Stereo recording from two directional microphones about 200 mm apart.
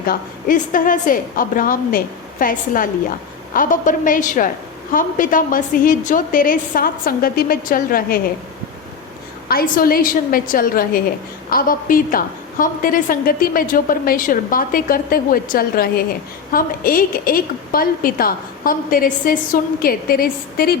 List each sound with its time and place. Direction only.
0.0 s a woman's voice: 45° left (ahead or behind)
9.5 s a woman's voice: 45° left (ahead or behind)